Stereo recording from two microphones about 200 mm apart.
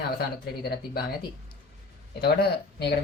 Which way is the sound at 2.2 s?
55° left (ahead or behind).